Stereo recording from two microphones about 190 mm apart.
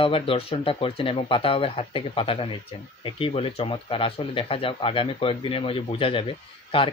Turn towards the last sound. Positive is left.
turn(degrees=25)  # may be behind; listen again after turning